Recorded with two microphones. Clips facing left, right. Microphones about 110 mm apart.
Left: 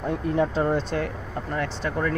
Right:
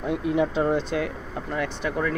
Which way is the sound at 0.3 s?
40° left (ahead or behind).